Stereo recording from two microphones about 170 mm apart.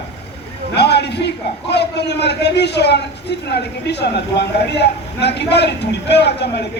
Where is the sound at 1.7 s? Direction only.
80° left.